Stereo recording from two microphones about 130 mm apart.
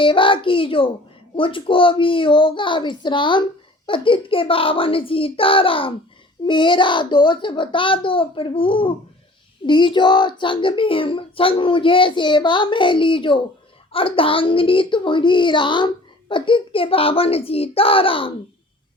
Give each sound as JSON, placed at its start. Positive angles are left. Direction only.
{"t": 0.0, "sound": "a child's voice", "side_deg": 40}